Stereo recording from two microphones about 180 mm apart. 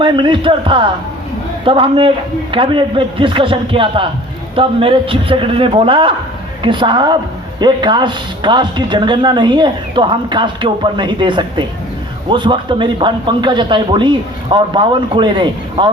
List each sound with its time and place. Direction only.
0.0 s speech: 25° right (ahead or behind)